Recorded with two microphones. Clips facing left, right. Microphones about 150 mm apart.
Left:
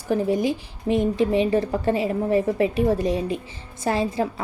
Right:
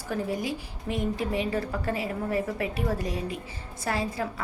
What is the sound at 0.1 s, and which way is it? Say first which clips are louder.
A woman's voice: left 8 dB; 20° left (ahead or behind).